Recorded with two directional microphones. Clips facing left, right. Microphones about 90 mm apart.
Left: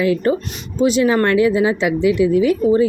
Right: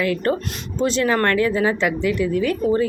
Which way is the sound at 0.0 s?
20° left (ahead or behind).